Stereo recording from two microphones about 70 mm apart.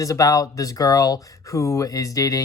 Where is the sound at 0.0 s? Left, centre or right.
Left.